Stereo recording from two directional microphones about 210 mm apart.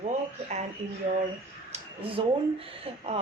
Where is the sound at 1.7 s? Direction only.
25° right (ahead or behind).